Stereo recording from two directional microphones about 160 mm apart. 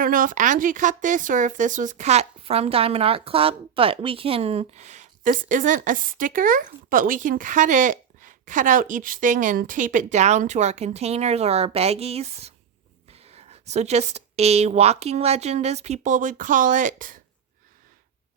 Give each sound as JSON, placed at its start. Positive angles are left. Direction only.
{"t": 0.0, "sound": "speech", "side_deg": -60}